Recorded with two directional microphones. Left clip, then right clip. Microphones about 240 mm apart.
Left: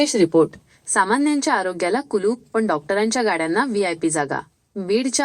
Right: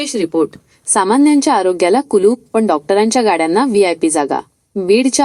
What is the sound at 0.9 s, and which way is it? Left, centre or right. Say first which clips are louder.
Speech: right 7 dB; right.